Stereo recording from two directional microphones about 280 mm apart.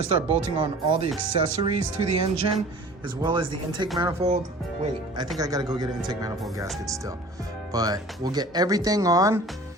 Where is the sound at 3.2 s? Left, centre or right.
Centre.